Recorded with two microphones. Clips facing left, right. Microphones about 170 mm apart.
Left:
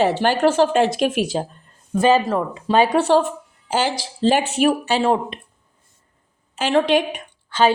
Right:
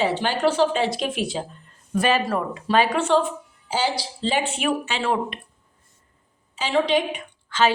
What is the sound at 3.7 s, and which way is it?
Speech, 50° left (ahead or behind).